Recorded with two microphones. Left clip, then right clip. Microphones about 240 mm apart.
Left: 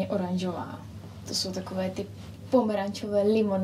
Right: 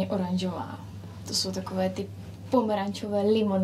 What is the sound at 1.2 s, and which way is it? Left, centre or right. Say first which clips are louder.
A woman's voice: right 1 dB; right.